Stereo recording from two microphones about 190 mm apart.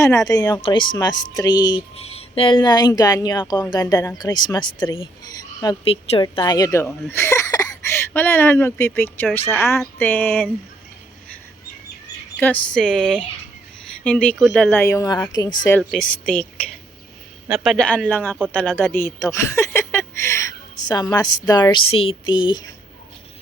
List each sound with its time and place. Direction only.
0.3 s speech: 20° left (ahead or behind)
5.9 s a woman's voice: 30° left (ahead or behind)
6.2 s speech: 20° left (ahead or behind)
12.4 s speech: 5° left (ahead or behind); by 15.5 s 20° left (ahead or behind)
15.8 s speech: centre (ahead or behind)
18.8 s a sound: 10° left (ahead or behind)
20.8 s a woman's voice: 20° left (ahead or behind)